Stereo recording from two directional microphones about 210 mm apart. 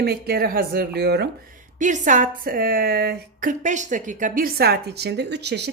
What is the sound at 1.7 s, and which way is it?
A woman's voice, 35° right (ahead or behind).